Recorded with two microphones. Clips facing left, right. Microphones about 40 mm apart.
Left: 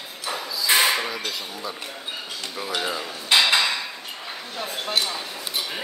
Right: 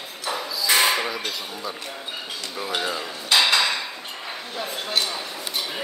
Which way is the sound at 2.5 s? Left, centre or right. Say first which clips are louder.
Right 1 dB; centre.